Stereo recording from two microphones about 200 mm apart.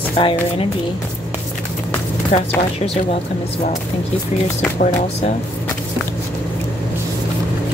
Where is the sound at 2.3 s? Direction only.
35° left (ahead or behind).